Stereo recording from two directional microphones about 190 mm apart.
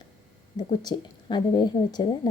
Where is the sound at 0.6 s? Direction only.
25° left (ahead or behind).